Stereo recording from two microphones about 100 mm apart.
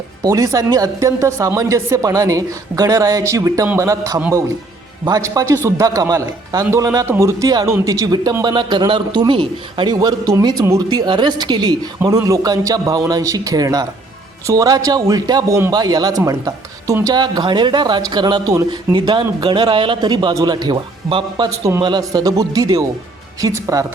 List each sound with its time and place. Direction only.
0.2 s a woman's voice: 35° right (ahead or behind)
5.2 s a woman's voice: 35° right (ahead or behind)
8.5 s speech: 50° right (ahead or behind)
9.9 s speech: 45° right (ahead or behind)
12.0 s a woman's voice: 35° right (ahead or behind)
21.1 s a woman's voice: 55° right (ahead or behind); by 23.8 s 30° right (ahead or behind)